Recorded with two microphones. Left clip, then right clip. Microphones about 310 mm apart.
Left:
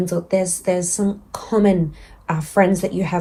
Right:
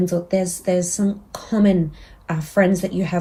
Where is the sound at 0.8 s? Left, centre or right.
Centre.